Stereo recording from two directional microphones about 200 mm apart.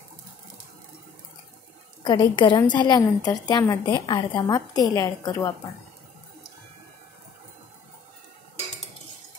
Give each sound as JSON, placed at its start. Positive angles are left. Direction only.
{"t": 2.0, "sound": "a woman's voice", "side_deg": 20}